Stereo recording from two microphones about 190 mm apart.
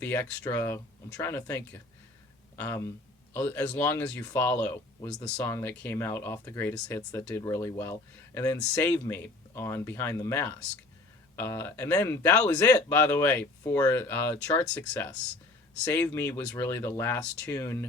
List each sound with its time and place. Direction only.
0.0 s speech: 10° left (ahead or behind)